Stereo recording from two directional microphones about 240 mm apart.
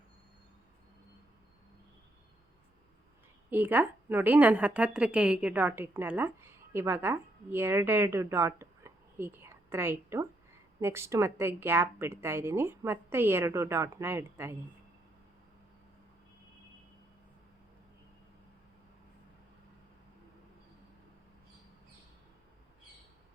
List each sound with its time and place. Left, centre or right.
3.5 s a woman's voice: centre